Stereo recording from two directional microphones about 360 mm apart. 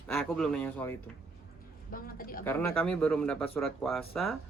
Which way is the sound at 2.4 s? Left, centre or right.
Centre.